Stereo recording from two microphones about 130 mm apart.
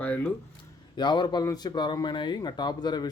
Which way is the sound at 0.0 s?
15° left (ahead or behind).